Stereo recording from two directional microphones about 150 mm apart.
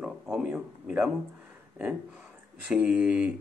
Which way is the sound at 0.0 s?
5° right (ahead or behind).